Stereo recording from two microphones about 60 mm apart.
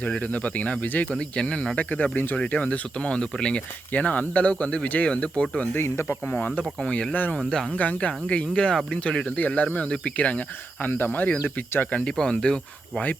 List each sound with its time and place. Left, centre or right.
0.0 s speech: left
5.7 s speech: left
6.3 s speech: left
12.0 s speech: centre